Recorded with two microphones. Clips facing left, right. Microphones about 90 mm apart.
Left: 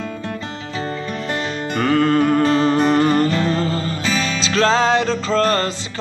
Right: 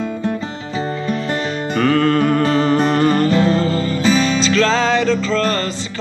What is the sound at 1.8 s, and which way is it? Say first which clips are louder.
Music: right 1 dB; 15° left (ahead or behind).